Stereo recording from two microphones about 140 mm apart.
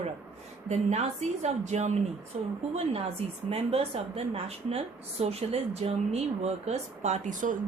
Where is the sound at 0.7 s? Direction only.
50° right (ahead or behind).